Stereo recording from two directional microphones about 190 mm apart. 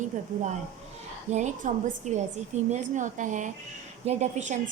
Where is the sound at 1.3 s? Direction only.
40° right (ahead or behind).